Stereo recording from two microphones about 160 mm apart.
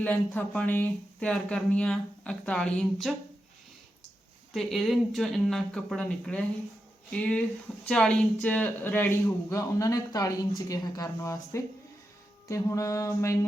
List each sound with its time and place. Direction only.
0.0 s speech: 10° left (ahead or behind)
4.5 s a man's voice: centre (ahead or behind); by 13.4 s 20° left (ahead or behind)